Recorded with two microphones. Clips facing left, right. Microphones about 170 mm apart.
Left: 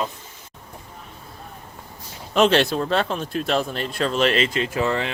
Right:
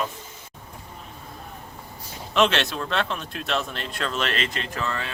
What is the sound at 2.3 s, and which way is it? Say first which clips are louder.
Speech: left 5 dB; 40° left (ahead or behind).